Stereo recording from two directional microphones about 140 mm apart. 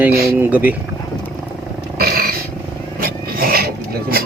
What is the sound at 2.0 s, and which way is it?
Roar, 90° right.